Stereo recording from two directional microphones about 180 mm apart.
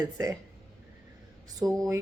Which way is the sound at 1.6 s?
20° right (ahead or behind).